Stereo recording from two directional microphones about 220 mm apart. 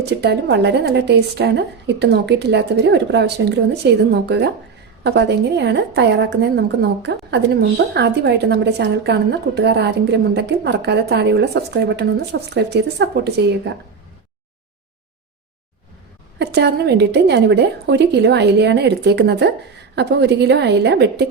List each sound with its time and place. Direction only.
0.0 s a woman's voice: 50° right (ahead or behind)
16.4 s a woman's voice: 50° right (ahead or behind)